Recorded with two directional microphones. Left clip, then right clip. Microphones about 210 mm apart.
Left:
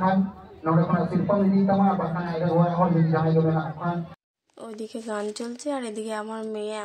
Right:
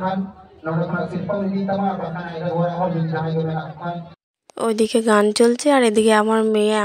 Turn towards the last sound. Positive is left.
turn(degrees=-45)  # may be behind; listen again after turning